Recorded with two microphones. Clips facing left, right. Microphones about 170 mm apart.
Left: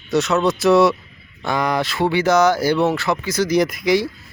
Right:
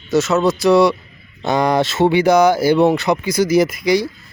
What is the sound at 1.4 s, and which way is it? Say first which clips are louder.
Speech: right 5 dB; 25° right (ahead or behind).